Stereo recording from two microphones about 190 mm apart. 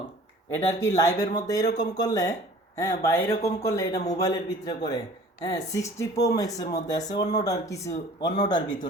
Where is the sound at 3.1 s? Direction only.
10° left (ahead or behind).